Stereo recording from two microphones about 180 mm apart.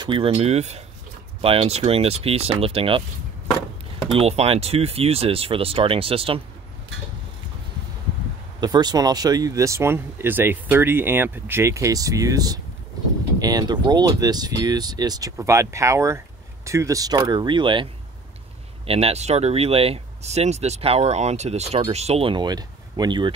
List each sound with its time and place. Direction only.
0.0 s speech: 25° right (ahead or behind)
4.1 s speech: 35° right (ahead or behind)
8.5 s speech: 25° right (ahead or behind)
18.9 s speech: 35° right (ahead or behind)